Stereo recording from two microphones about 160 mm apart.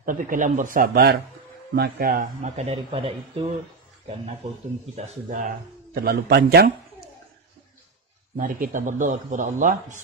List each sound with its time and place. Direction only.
0.0 s a man's voice: 55° right (ahead or behind); by 3.4 s 35° right (ahead or behind)
4.9 s a man's voice: 50° right (ahead or behind)
5.9 s a man's voice: 75° right (ahead or behind)
8.4 s a man's voice: 55° right (ahead or behind)